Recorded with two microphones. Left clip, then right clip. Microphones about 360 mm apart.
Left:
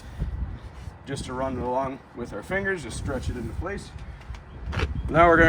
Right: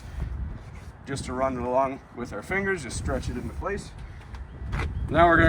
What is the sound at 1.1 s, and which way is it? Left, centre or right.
Speech, centre.